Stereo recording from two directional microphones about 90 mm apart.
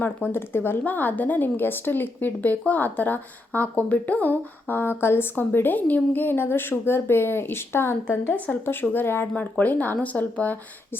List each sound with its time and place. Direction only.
0.0 s speech: 25° left (ahead or behind)